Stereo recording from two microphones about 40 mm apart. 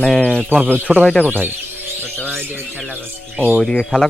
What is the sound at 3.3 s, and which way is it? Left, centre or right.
Speech, right.